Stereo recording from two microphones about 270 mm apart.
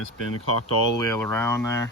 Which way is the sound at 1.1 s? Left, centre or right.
Centre.